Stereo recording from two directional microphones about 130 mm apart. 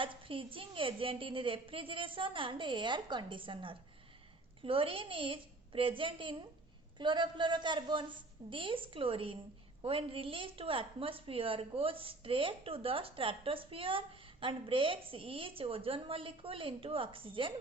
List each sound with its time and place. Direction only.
0.0 s a woman's voice: 40° right (ahead or behind)